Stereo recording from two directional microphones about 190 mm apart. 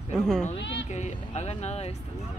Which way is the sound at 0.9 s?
35° left (ahead or behind).